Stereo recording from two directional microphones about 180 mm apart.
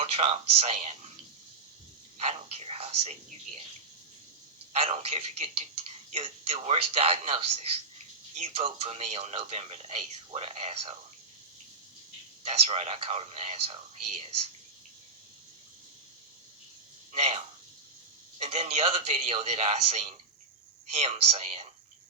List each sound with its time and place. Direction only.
0.0 s speech: 35° right (ahead or behind)
2.1 s speech: 35° right (ahead or behind)
4.7 s speech: 35° right (ahead or behind)
8.5 s speech: 35° right (ahead or behind)
12.4 s speech: 35° right (ahead or behind)
17.1 s speech: 35° right (ahead or behind)